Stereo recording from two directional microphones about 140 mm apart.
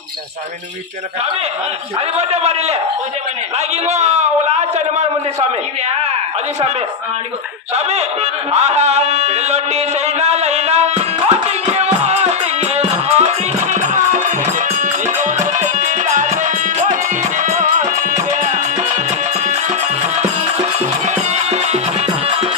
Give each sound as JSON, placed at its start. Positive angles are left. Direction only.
{"t": 2.1, "sound": "a man's voice", "side_deg": -50}
{"t": 3.8, "sound": "a man's voice", "side_deg": -55}
{"t": 7.8, "sound": "music", "side_deg": -50}
{"t": 20.7, "sound": "music", "side_deg": -50}